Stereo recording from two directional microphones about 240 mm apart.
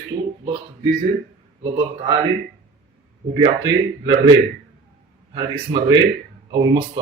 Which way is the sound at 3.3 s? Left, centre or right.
Centre.